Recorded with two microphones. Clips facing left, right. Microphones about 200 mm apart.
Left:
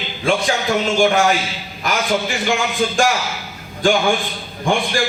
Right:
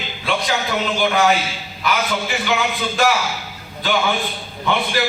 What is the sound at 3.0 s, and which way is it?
A man's voice, 45° left (ahead or behind).